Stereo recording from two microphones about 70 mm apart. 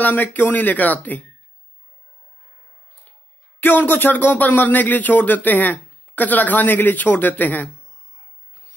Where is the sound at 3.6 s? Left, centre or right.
Left.